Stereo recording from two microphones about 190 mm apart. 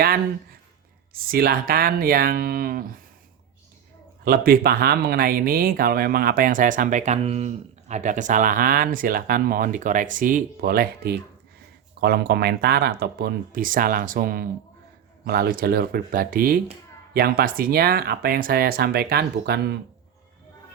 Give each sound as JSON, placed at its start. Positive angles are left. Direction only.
{"t": 1.1, "sound": "speech", "side_deg": -50}
{"t": 4.2, "sound": "speech", "side_deg": -50}